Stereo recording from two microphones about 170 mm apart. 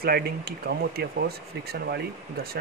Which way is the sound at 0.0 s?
65° right (ahead or behind).